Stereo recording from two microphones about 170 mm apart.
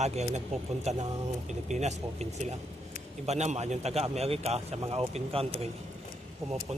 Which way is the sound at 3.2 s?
40° right (ahead or behind).